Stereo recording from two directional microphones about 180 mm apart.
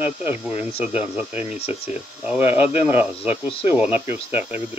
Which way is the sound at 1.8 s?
10° right (ahead or behind).